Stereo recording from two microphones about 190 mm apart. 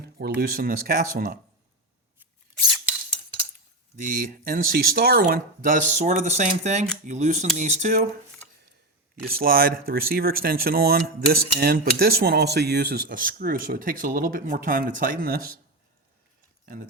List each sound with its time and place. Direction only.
0.0 s speech: 55° right (ahead or behind)
3.9 s speech: 45° right (ahead or behind)
9.2 s speech: 50° right (ahead or behind)